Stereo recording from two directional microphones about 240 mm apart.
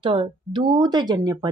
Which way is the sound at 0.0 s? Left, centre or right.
Right.